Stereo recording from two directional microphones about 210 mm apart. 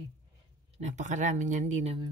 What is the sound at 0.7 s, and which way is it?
Speech, 35° right (ahead or behind).